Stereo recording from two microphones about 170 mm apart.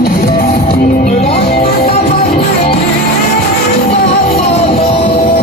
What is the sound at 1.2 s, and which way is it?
Music, 70° left (ahead or behind).